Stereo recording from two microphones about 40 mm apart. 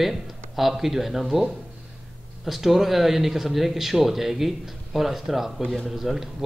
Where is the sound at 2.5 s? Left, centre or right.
Centre.